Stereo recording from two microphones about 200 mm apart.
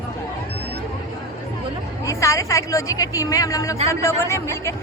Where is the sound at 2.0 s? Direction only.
15° left (ahead or behind).